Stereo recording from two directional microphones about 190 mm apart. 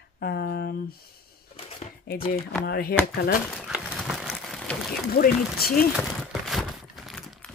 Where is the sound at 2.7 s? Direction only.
55° left (ahead or behind).